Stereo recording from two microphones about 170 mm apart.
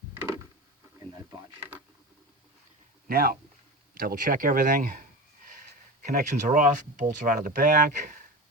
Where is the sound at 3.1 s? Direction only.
60° right (ahead or behind).